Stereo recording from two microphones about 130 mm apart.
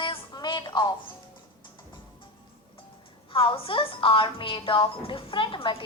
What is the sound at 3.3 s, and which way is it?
A woman's voice, 45° left (ahead or behind).